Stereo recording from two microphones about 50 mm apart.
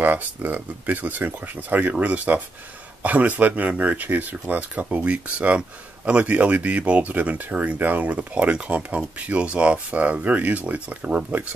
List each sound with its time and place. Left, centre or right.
0.0 s speech: right
5.6 s speech: right
6.2 s speech: right